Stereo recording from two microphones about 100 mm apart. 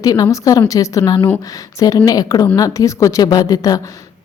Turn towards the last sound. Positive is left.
turn(degrees=40)  # may be behind; listen again after turning